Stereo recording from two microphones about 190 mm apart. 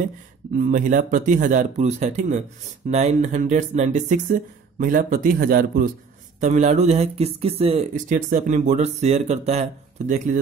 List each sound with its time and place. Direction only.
0.5 s speech: 45° right (ahead or behind)
6.4 s speech: 35° right (ahead or behind)